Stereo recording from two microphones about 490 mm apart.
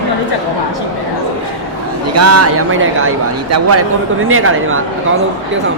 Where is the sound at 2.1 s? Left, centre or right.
Right.